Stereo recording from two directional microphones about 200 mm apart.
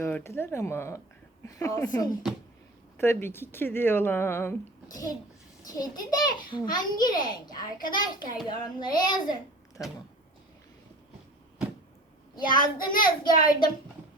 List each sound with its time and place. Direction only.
0.0 s a child's voice: 10° left (ahead or behind)
12.5 s a child's voice: 45° left (ahead or behind)